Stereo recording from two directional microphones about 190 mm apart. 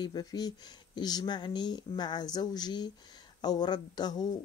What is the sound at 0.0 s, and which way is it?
Speech, 20° left (ahead or behind).